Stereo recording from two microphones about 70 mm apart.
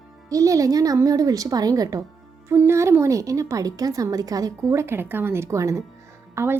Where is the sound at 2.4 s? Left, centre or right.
Right.